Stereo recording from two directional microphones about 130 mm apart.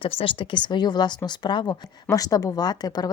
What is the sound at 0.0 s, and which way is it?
A woman's voice, 45° left (ahead or behind).